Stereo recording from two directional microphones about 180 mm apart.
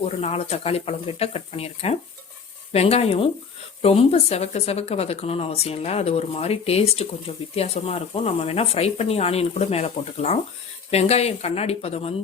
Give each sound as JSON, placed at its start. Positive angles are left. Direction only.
{"t": 0.0, "sound": "speech", "side_deg": 35}